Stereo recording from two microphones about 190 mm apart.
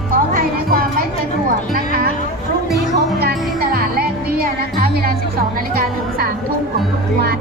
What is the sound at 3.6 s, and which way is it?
Music, 50° right (ahead or behind).